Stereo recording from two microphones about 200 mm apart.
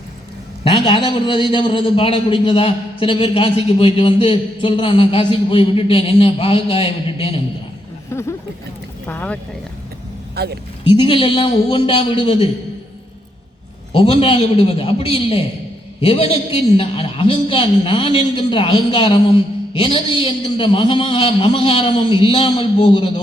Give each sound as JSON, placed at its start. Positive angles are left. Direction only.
{"t": 0.6, "sound": "a man's voice", "side_deg": 25}
{"t": 8.1, "sound": "speech", "side_deg": 15}
{"t": 10.3, "sound": "speech", "side_deg": -55}
{"t": 10.8, "sound": "a man's voice", "side_deg": 25}
{"t": 13.9, "sound": "a man's voice", "side_deg": 30}